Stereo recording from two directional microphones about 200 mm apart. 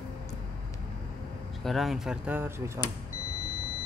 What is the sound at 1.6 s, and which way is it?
Speech, centre (ahead or behind).